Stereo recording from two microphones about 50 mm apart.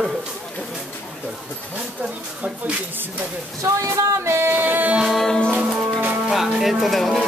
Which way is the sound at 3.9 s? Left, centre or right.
Right.